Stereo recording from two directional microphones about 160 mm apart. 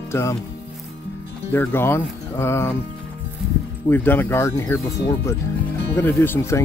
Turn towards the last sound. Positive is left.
turn(degrees=15)  # may be behind; listen again after turning